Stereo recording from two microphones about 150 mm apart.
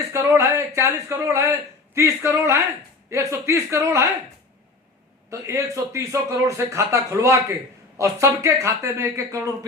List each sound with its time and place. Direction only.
0.1 s speech: 20° right (ahead or behind)
5.3 s speech: 20° right (ahead or behind)